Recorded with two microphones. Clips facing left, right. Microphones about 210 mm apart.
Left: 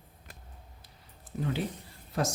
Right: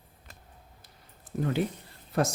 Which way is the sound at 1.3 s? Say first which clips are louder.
Right 4 dB; 50° right (ahead or behind).